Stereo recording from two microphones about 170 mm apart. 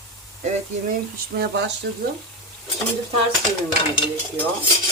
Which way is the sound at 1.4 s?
85° right.